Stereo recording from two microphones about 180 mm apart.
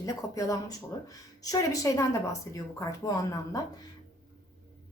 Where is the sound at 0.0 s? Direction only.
20° left (ahead or behind).